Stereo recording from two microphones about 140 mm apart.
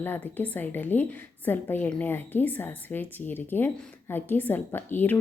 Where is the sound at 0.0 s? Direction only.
15° left (ahead or behind).